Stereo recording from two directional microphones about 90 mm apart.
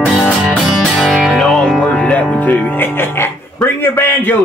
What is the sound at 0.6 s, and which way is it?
Music, centre (ahead or behind).